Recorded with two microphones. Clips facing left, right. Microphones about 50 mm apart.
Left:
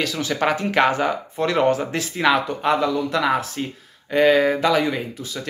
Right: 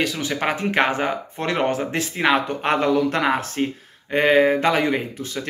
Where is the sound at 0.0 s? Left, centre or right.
Right.